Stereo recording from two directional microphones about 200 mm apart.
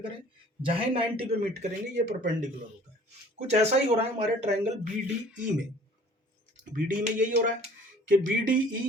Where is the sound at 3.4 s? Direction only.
30° right (ahead or behind).